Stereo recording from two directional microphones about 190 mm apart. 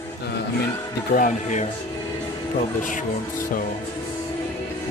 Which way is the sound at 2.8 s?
40° left (ahead or behind).